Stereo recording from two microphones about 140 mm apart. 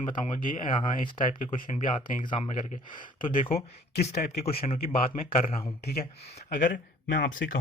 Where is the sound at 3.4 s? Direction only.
45° left (ahead or behind).